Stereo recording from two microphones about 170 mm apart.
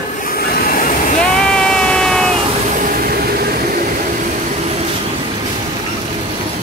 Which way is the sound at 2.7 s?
50° right (ahead or behind).